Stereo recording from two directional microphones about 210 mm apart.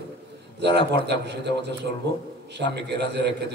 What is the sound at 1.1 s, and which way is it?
Speech, 55° right (ahead or behind).